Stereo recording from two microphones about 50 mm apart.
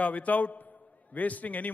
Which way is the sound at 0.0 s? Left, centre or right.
Left.